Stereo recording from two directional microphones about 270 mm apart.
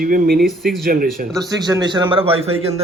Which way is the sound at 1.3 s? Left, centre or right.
Centre.